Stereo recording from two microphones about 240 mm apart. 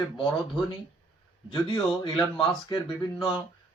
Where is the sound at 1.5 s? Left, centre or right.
Centre.